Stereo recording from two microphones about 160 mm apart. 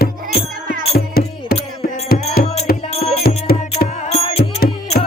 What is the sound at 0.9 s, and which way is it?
Music, 80° left.